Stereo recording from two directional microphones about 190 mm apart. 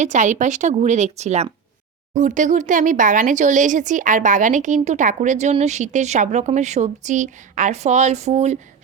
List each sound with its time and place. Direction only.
0.0 s speech: 40° right (ahead or behind)